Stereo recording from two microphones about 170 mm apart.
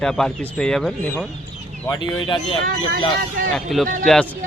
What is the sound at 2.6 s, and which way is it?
Speech, 60° right (ahead or behind).